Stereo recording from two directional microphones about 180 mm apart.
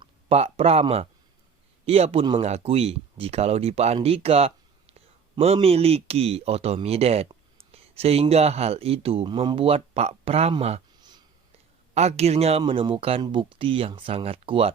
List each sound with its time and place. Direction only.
0.0 s speech: 35° right (ahead or behind)
11.9 s speech: 35° right (ahead or behind)